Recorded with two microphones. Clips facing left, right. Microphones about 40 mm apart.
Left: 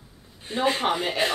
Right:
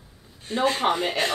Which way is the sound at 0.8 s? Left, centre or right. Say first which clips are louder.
Right 1 dB; centre.